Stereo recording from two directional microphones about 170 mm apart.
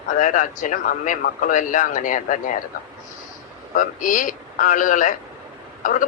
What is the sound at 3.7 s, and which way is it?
A man's voice, 50° left (ahead or behind).